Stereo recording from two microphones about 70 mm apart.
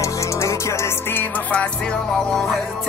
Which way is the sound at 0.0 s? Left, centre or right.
Left.